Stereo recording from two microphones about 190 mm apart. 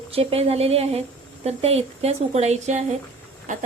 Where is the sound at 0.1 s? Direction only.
30° right (ahead or behind).